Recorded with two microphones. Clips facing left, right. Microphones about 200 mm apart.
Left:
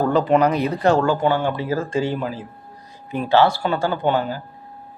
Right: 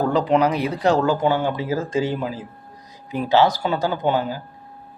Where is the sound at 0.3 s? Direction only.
5° right (ahead or behind).